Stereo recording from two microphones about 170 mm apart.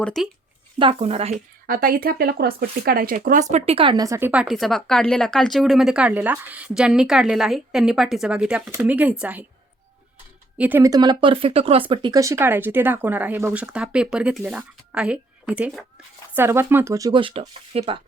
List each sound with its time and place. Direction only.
0.0 s speech: 5° left (ahead or behind)
0.8 s speech: 35° right (ahead or behind)
1.6 s speech: 55° right (ahead or behind); by 9.4 s 10° right (ahead or behind)
10.6 s speech: 10° right (ahead or behind); by 18.0 s 30° right (ahead or behind)